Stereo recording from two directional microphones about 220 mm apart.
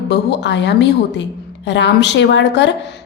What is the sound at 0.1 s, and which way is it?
A woman's voice, 50° left (ahead or behind).